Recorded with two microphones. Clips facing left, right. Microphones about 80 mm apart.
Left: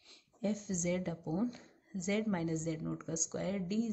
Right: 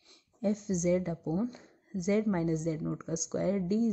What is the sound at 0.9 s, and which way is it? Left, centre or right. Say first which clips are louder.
Speech: right 6 dB; right.